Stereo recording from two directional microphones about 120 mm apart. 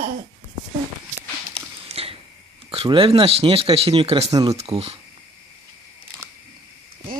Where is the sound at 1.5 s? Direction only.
50° right (ahead or behind).